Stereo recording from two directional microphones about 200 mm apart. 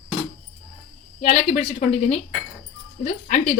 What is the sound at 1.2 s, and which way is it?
Speech, 30° left (ahead or behind).